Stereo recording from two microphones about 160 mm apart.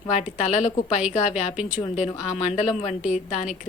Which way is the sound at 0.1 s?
45° left (ahead or behind).